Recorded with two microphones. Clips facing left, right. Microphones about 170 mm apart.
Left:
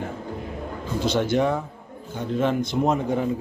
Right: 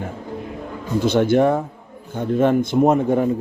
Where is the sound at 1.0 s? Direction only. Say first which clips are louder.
Right 6 dB; 55° right (ahead or behind).